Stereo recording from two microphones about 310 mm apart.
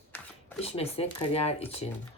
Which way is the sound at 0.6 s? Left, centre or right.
Centre.